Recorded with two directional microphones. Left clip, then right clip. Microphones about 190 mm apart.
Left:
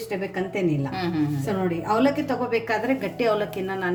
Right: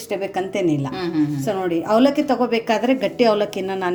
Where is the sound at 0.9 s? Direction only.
Centre (ahead or behind).